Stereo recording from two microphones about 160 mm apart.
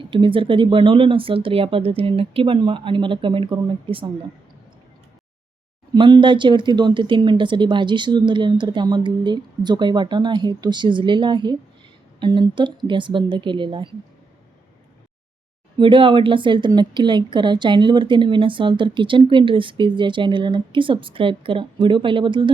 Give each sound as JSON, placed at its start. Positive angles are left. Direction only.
{"t": 0.0, "sound": "speech", "side_deg": -30}
{"t": 5.9, "sound": "speech", "side_deg": -30}
{"t": 15.8, "sound": "speech", "side_deg": -30}